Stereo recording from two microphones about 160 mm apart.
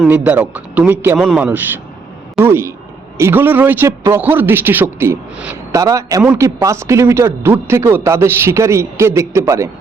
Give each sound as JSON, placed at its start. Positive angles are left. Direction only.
{"t": 0.3, "sound": "a man's voice", "side_deg": -10}